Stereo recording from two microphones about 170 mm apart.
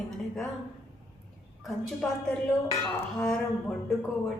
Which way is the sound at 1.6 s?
Centre (ahead or behind).